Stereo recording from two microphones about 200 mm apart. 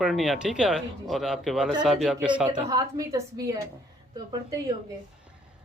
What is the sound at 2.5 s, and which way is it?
A woman's voice, 20° right (ahead or behind).